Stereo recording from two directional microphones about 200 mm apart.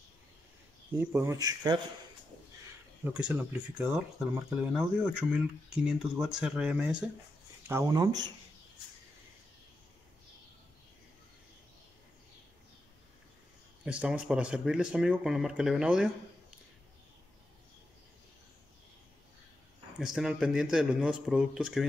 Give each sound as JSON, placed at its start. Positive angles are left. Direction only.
{"t": 0.9, "sound": "speech", "side_deg": -15}
{"t": 3.1, "sound": "speech", "side_deg": -5}
{"t": 13.8, "sound": "speech", "side_deg": -5}
{"t": 20.0, "sound": "speech", "side_deg": 0}